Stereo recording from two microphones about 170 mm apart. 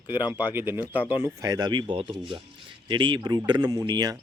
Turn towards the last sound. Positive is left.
turn(degrees=-20)  # may be behind; listen again after turning